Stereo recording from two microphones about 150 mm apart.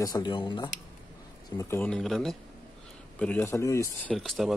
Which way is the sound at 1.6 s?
15° left (ahead or behind).